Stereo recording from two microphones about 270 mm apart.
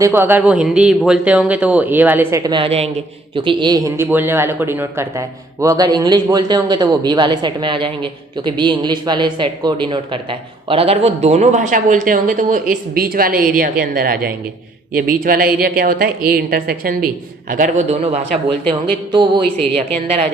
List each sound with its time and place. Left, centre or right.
0.0 s a man's voice: centre
19.4 s speech: centre